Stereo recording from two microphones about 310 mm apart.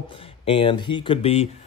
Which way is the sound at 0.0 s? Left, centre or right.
Centre.